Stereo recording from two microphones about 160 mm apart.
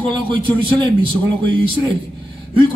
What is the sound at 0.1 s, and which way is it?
A man's voice, 30° right (ahead or behind).